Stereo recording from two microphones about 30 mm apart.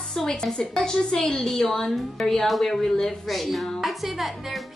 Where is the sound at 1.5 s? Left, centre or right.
Centre.